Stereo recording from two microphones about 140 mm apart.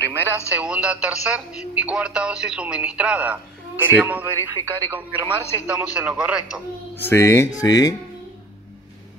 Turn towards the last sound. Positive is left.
turn(degrees=25)  # may be behind; listen again after turning